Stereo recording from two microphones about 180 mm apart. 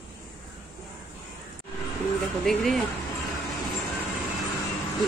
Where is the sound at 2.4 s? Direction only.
Centre (ahead or behind).